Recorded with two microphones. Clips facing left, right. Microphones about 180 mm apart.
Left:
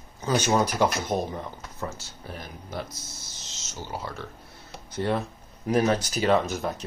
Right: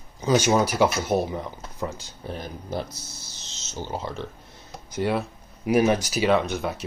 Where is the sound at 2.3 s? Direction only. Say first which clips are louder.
Right 6 dB; 30° right (ahead or behind).